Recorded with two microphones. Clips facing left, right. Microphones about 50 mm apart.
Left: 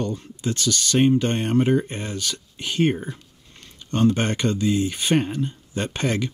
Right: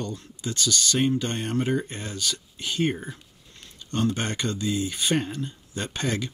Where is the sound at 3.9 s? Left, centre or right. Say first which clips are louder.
Left 6 dB; left.